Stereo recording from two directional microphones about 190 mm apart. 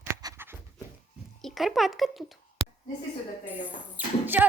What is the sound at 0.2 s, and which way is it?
Writing, 15° right (ahead or behind).